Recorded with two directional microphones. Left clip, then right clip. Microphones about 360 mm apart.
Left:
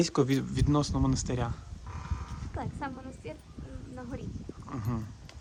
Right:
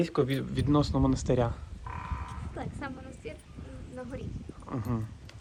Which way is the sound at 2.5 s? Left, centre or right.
Left.